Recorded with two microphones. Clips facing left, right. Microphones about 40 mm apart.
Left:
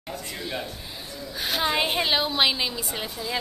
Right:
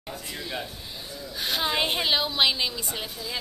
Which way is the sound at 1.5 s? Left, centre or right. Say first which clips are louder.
Left 2 dB; centre.